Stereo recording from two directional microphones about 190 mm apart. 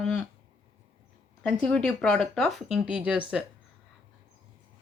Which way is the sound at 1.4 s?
5° left (ahead or behind).